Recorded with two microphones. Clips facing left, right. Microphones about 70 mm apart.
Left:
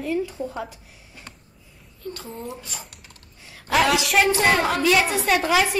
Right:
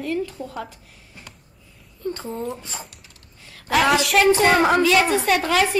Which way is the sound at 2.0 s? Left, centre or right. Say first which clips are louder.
Right 6 dB; right.